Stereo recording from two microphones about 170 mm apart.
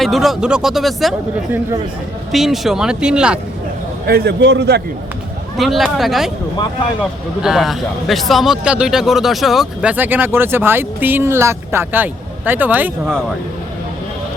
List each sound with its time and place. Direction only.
0.0 s speech: centre (ahead or behind)
2.3 s speech: centre (ahead or behind)
4.0 s a man's voice: 65° right (ahead or behind)
5.5 s speech: centre (ahead or behind)
7.4 s a man's voice: centre (ahead or behind)